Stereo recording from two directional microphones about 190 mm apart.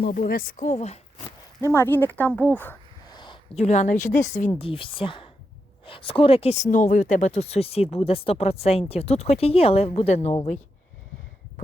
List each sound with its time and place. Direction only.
0.0 s speech: 50° left (ahead or behind)
1.6 s speech: 15° left (ahead or behind)
3.2 s a sound: 25° left (ahead or behind)
3.6 s speech: 40° left (ahead or behind)
4.5 s a woman's voice: 30° left (ahead or behind)